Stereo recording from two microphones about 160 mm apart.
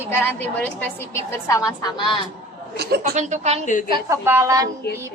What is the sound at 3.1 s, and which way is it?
Speech, 45° right (ahead or behind).